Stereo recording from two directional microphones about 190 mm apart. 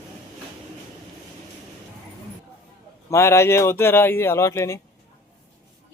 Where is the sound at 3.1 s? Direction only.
15° left (ahead or behind).